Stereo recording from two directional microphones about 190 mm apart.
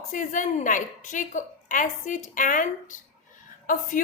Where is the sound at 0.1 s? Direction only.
40° left (ahead or behind).